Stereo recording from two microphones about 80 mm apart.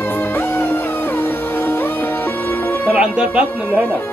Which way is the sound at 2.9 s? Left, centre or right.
Centre.